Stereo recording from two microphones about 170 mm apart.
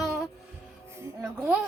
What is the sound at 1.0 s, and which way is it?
Speech, 10° right (ahead or behind).